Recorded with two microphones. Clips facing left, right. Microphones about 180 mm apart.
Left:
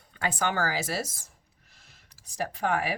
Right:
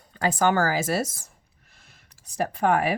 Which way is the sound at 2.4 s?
55° right (ahead or behind).